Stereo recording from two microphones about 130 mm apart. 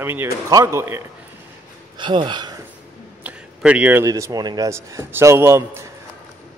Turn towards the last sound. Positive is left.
turn(degrees=-20)  # may be behind; listen again after turning